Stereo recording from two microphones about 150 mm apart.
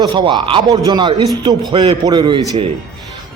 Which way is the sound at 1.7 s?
40° right (ahead or behind).